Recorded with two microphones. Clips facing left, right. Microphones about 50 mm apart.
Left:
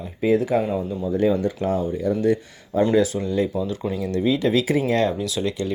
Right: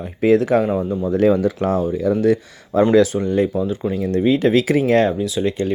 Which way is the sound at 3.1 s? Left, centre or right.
Right.